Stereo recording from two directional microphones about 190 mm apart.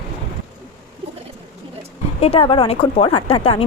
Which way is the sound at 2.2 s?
30° left (ahead or behind).